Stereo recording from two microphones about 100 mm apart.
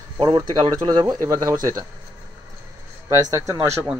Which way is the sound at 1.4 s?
30° right (ahead or behind).